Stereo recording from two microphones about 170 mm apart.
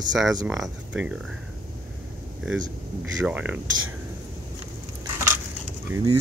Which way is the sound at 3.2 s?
10° right (ahead or behind).